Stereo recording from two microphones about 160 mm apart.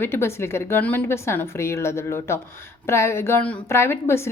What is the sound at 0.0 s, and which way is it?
A woman's voice, 15° left (ahead or behind).